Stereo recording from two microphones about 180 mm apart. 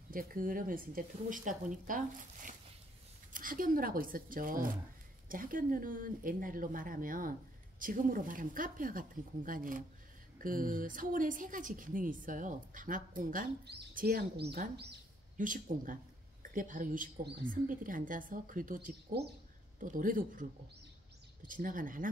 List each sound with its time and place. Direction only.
0.1 s a woman's voice: 50° right (ahead or behind)
15.3 s a woman's voice: 45° right (ahead or behind)